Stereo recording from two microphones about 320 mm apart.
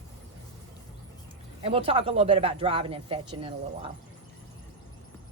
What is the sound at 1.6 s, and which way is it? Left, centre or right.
Speech, centre.